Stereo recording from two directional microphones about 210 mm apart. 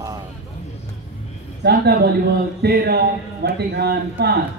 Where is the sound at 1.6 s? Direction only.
50° right (ahead or behind).